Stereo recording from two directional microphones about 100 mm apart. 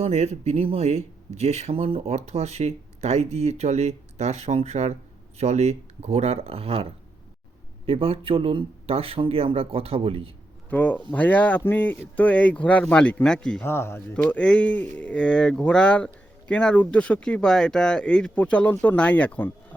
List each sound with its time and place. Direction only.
0.0 s speech: 90° right; by 10.3 s 70° right (ahead or behind)
10.7 s speech: 15° left (ahead or behind)
13.7 s speech: 25° left (ahead or behind)
14.1 s speech: 10° left (ahead or behind)